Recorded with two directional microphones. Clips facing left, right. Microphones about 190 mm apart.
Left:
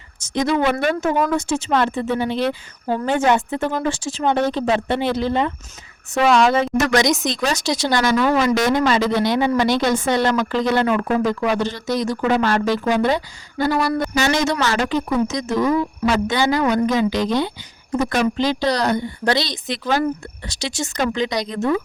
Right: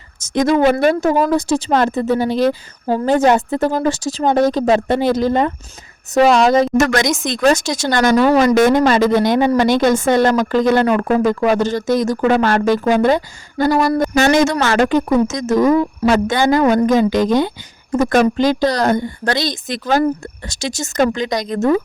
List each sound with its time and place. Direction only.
0.2 s speech: 45° right (ahead or behind)